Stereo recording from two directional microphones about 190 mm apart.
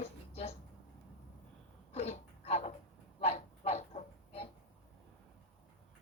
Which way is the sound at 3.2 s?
35° left (ahead or behind).